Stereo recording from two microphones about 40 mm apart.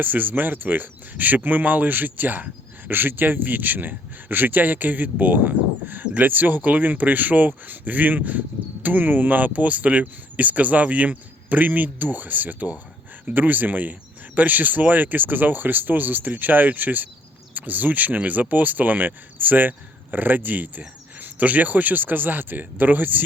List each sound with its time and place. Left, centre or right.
0.0 s speech: right